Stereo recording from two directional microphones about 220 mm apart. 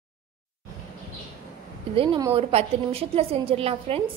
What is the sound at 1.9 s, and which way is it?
A woman's voice, 25° right (ahead or behind).